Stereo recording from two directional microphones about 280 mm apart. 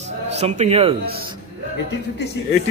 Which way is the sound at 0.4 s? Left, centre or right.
Right.